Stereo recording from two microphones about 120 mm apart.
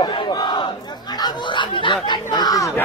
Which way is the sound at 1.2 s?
40° left (ahead or behind).